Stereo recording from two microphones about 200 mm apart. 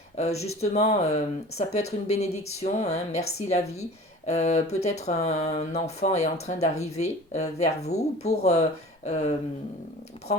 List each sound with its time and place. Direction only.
0.2 s speech: 30° left (ahead or behind)